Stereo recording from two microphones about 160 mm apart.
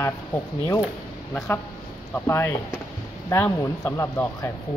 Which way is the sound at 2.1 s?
15° left (ahead or behind).